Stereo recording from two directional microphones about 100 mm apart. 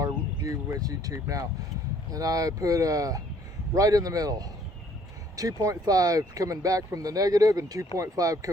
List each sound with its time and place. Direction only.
0.0 s speech: 35° right (ahead or behind)